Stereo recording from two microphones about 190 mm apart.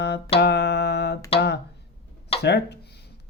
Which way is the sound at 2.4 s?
60° left (ahead or behind).